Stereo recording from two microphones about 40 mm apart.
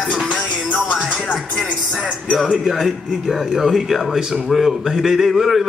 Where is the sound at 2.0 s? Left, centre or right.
Right.